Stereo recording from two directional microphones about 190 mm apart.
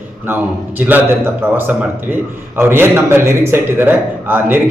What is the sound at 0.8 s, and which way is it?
A man's voice, 10° right (ahead or behind).